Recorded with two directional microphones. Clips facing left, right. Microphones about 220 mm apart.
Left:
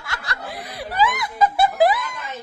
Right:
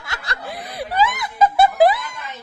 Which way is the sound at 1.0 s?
25° right (ahead or behind).